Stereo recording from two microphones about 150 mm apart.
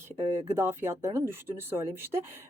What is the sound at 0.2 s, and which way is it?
Speech, 15° right (ahead or behind).